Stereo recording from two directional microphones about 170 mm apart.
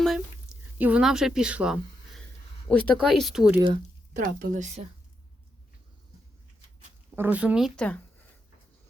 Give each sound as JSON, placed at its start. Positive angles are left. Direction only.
{"t": 0.0, "sound": "a sound", "side_deg": 0}
{"t": 2.6, "sound": "speech", "side_deg": 5}
{"t": 4.4, "sound": "speech", "side_deg": -50}
{"t": 7.2, "sound": "speech", "side_deg": -10}